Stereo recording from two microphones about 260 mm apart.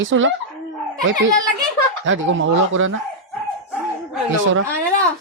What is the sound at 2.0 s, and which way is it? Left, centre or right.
Speech, right.